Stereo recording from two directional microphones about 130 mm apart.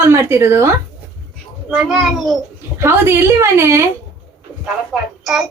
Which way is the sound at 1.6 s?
5° right (ahead or behind).